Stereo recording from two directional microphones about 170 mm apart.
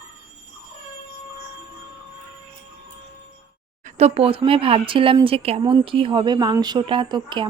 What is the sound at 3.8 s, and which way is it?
Speech, 35° right (ahead or behind).